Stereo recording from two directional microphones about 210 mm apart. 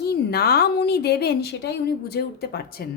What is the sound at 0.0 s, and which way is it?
A woman's voice, 50° left (ahead or behind).